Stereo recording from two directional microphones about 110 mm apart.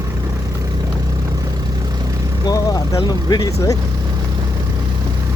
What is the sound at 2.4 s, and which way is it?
Vehicle, 35° left (ahead or behind).